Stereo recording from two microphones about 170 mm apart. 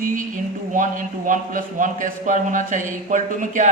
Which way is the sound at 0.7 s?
50° right (ahead or behind).